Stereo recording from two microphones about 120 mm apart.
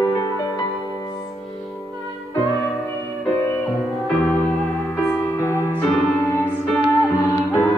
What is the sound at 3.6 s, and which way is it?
Music, centre (ahead or behind).